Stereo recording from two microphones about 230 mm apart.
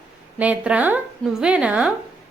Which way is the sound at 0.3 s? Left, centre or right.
Centre.